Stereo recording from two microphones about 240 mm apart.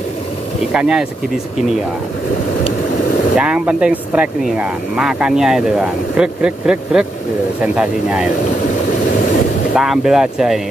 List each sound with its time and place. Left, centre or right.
0.7 s speech: centre
3.3 s speech: centre
9.8 s speech: centre